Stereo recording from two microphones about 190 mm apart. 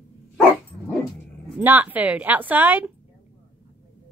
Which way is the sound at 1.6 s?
10° right (ahead or behind).